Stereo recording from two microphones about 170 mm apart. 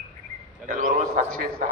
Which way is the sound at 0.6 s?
50° right (ahead or behind).